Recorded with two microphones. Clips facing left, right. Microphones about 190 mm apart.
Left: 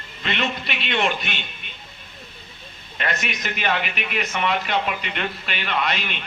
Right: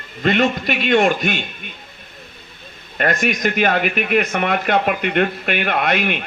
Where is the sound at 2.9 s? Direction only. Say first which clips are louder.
Right 9 dB; 50° right (ahead or behind).